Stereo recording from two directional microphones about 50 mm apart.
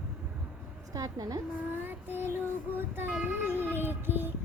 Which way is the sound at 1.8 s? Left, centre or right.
Right.